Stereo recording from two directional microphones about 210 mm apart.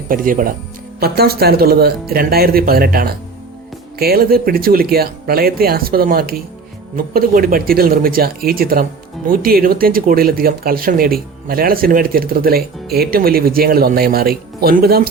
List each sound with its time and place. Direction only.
0.1 s speech: 40° right (ahead or behind)